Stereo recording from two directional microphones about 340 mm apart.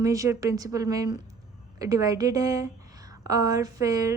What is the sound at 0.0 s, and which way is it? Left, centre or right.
A woman's voice, centre.